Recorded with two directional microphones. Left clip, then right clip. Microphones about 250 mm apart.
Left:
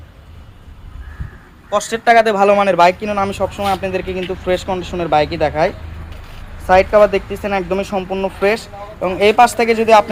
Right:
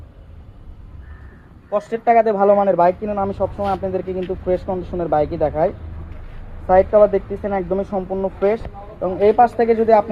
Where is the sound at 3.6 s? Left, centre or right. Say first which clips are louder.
Left 3 dB; left.